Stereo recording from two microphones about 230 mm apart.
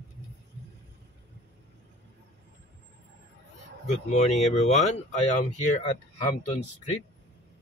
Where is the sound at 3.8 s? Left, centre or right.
Left.